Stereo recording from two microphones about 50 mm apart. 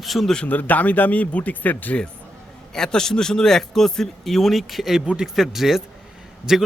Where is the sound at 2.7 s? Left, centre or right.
Centre.